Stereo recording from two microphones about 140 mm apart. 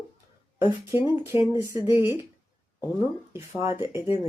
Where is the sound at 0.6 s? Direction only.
15° right (ahead or behind).